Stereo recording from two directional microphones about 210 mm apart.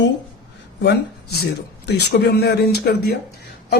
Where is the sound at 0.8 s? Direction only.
50° left (ahead or behind).